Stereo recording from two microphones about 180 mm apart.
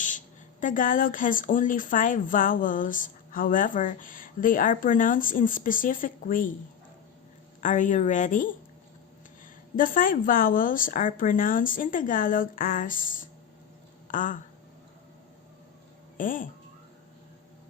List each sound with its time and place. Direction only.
0.6 s speech: 45° left (ahead or behind)
7.6 s speech: 45° left (ahead or behind)
9.7 s speech: 50° left (ahead or behind)
16.1 s speech: 50° left (ahead or behind)